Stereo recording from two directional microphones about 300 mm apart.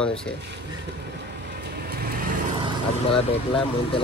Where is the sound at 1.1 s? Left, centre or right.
Right.